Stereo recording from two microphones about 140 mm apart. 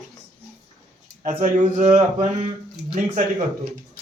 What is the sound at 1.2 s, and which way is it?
Speech, 65° right (ahead or behind).